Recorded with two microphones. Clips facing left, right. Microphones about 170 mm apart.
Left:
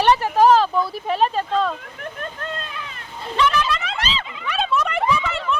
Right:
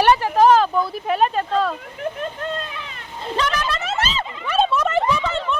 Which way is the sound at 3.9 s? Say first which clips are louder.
Right 3 dB; 45° right (ahead or behind).